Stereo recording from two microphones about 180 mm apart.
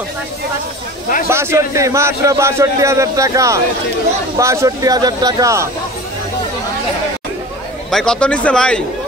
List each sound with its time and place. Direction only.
1.3 s a man's voice: 15° right (ahead or behind)
7.9 s speech: 5° left (ahead or behind)